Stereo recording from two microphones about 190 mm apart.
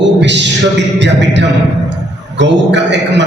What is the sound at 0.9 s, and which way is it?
A man's voice, 65° right (ahead or behind).